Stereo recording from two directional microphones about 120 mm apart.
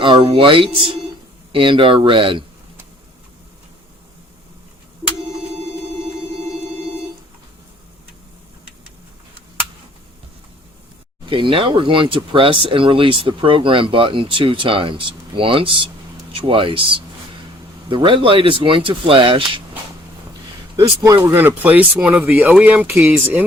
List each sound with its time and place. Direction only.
0.0 s speech: 45° right (ahead or behind)
11.3 s speech: 45° right (ahead or behind)
21.0 s speech: 25° right (ahead or behind)